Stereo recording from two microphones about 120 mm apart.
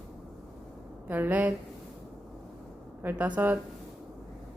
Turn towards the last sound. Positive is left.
turn(degrees=-15)  # may be behind; listen again after turning